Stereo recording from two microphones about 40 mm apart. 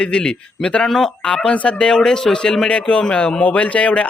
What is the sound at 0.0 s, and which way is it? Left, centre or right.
Speech, left.